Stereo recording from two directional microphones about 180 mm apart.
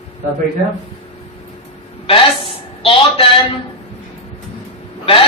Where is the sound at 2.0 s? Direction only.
30° left (ahead or behind).